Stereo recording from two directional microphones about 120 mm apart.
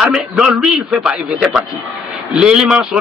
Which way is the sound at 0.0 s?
5° right (ahead or behind).